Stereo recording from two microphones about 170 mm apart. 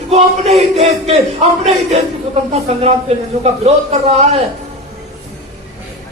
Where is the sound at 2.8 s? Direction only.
40° right (ahead or behind).